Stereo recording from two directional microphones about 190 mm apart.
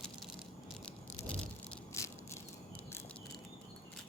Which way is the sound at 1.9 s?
15° left (ahead or behind).